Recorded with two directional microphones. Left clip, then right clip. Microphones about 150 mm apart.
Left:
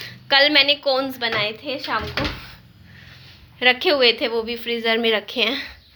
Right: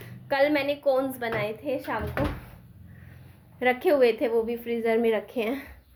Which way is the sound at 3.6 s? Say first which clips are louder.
Left 6 dB; 20° right (ahead or behind).